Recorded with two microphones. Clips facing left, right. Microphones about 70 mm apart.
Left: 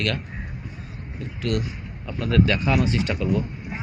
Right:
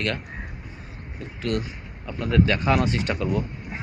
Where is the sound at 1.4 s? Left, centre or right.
Right.